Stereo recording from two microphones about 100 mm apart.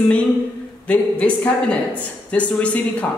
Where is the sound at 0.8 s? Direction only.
15° left (ahead or behind).